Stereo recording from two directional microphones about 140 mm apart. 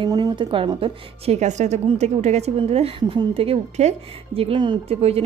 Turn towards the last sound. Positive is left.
turn(degrees=-45)  # may be behind; listen again after turning